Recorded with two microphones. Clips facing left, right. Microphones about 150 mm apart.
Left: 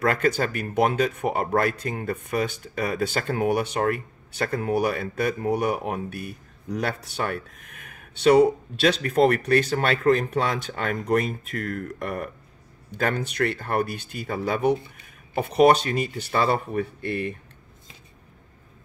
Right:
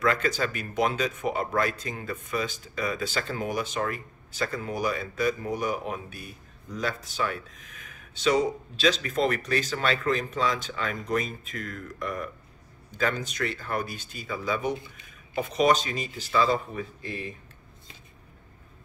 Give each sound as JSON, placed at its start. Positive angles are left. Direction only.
{"t": 0.0, "sound": "speech", "side_deg": 55}